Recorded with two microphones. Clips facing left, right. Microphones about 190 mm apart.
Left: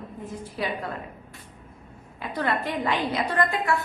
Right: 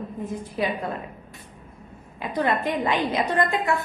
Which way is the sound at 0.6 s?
20° right (ahead or behind).